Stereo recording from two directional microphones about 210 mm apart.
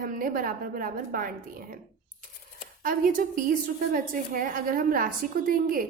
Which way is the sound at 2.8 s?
40° right (ahead or behind).